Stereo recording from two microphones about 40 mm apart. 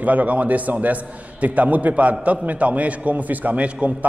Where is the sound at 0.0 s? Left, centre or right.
Right.